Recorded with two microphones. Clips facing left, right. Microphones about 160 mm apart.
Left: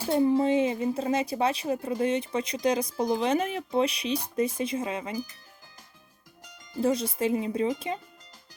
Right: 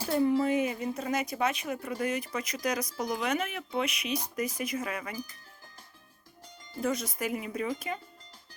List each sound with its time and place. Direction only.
0.1 s a woman's voice: 25° left (ahead or behind)
6.8 s a woman's voice: 30° left (ahead or behind)